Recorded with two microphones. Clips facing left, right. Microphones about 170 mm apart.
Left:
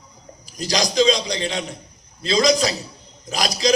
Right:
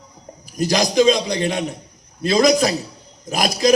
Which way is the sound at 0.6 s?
55° right (ahead or behind).